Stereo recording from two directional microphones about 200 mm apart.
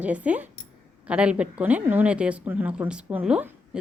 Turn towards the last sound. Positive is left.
turn(degrees=-5)  # may be behind; listen again after turning